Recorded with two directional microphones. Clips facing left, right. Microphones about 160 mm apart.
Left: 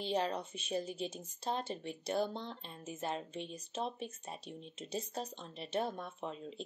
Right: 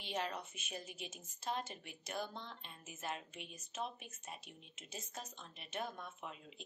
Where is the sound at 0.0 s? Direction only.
30° left (ahead or behind).